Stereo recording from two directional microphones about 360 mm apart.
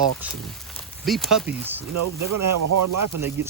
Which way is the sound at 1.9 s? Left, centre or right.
Right.